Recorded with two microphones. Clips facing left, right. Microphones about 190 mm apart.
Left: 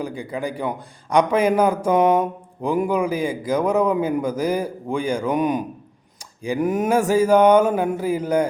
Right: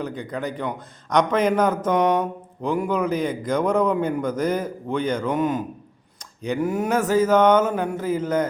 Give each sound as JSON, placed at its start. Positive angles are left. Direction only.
{"t": 0.0, "sound": "speech", "side_deg": 10}